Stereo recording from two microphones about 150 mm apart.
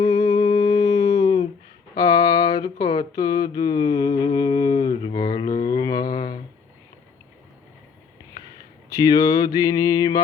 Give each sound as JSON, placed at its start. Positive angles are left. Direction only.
{"t": 0.0, "sound": "a sound", "side_deg": 30}
{"t": 2.0, "sound": "mantra", "side_deg": 25}
{"t": 8.9, "sound": "mantra", "side_deg": 25}